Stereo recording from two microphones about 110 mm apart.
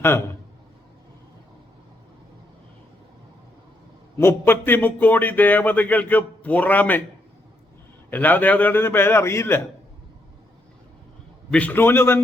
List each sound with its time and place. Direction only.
4.2 s speech: 20° left (ahead or behind)
8.1 s a man's voice: 15° left (ahead or behind)
11.5 s a man's voice: 15° left (ahead or behind)